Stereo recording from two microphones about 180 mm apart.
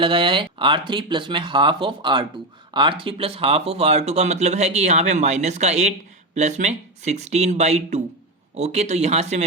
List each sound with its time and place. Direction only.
0.0 s speech: 30° right (ahead or behind)